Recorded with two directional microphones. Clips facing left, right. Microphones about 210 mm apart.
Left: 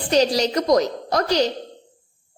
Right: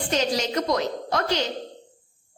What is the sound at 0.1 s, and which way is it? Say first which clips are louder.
A woman's voice: left 7 dB; 35° left (ahead or behind).